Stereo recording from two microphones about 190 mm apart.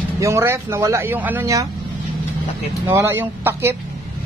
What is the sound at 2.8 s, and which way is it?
Speech, 10° right (ahead or behind).